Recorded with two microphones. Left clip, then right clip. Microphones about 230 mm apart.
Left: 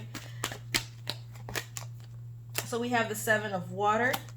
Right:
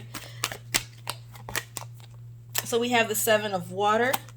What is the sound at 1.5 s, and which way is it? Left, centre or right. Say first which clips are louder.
Scissors: right 4 dB; right.